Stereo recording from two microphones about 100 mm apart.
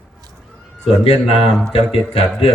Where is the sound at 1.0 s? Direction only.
90° left.